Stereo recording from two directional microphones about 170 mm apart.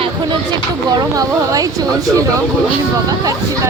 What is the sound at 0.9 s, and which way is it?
Speech, 20° right (ahead or behind).